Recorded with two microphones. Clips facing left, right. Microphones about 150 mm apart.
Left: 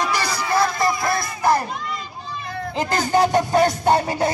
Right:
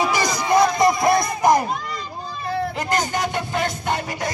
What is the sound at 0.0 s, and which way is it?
Crowd, 10° right (ahead or behind).